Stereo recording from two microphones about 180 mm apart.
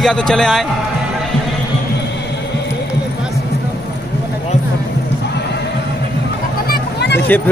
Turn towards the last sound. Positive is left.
turn(degrees=10)  # may be behind; listen again after turning